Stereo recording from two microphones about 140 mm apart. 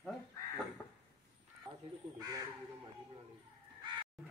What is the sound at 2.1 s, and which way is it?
Speech, 30° right (ahead or behind).